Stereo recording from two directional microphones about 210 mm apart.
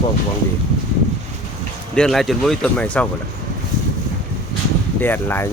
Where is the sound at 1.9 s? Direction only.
Centre (ahead or behind).